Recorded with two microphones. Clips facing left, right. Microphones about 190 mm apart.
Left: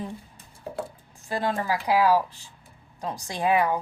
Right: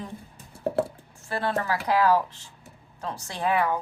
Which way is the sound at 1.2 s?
15° left (ahead or behind).